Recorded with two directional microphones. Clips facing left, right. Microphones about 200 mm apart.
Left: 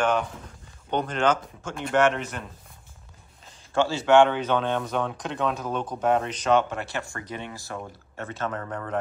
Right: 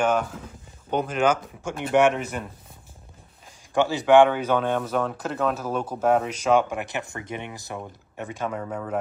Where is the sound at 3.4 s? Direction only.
15° right (ahead or behind).